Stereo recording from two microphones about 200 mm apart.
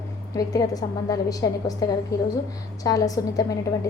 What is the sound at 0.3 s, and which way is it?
A woman's voice, 20° left (ahead or behind).